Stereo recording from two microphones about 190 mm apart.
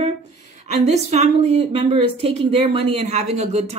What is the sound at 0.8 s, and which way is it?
Speech, 35° right (ahead or behind).